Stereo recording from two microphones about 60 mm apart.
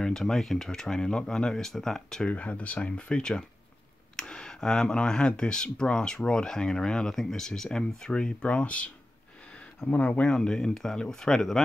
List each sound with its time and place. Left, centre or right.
0.0 s speech: centre
2.2 s speech: left